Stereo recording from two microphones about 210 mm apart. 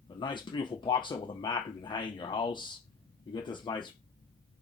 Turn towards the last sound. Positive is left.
turn(degrees=20)  # may be behind; listen again after turning